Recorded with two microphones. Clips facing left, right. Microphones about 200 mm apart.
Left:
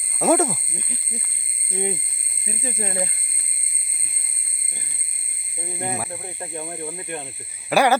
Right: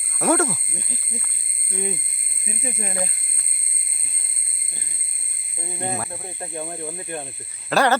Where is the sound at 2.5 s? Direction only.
35° left (ahead or behind).